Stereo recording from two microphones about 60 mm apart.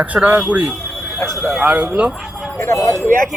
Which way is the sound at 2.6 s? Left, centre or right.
Left.